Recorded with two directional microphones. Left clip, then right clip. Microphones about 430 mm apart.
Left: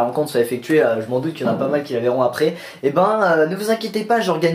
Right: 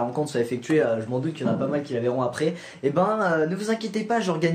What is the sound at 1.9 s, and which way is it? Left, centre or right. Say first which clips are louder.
Speech: left 8 dB; centre.